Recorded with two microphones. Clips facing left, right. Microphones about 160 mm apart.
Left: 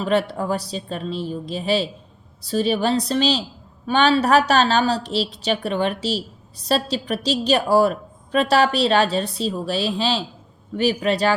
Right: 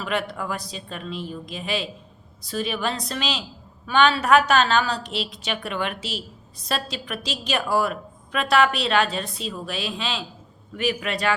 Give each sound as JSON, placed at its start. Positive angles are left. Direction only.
{"t": 0.0, "sound": "a woman's voice", "side_deg": 35}